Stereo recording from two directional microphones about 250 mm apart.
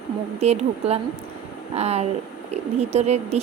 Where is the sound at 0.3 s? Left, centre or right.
Right.